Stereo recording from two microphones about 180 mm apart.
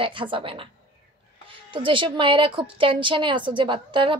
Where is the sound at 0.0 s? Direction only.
30° right (ahead or behind).